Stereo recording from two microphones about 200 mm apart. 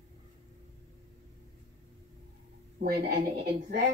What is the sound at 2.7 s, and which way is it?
A woman's voice, 55° right (ahead or behind).